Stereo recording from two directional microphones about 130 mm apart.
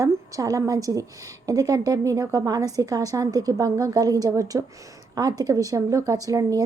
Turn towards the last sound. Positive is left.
turn(degrees=-25)  # may be behind; listen again after turning